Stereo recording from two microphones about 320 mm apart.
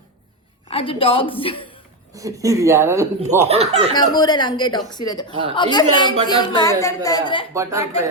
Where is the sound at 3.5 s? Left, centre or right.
Centre.